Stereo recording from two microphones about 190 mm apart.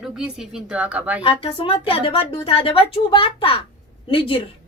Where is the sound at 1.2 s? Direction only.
30° left (ahead or behind).